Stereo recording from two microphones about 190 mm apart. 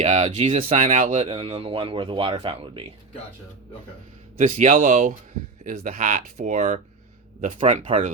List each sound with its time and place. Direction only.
0.0 s speech: 35° right (ahead or behind)
4.4 s speech: 35° right (ahead or behind)
7.9 s speech: 30° right (ahead or behind)